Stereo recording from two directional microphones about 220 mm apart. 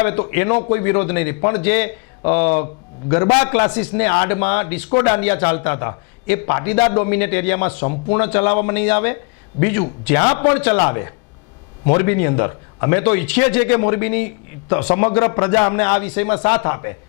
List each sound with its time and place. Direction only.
0.0 s a man's voice: 15° left (ahead or behind)
1.4 s a man's voice: 25° left (ahead or behind)
1.6 s a man's voice: 10° left (ahead or behind)
2.2 s a man's voice: 30° left (ahead or behind); by 4.9 s 10° left (ahead or behind)
4.9 s a man's voice: 25° left (ahead or behind)
8.7 s a man's voice: 15° left (ahead or behind)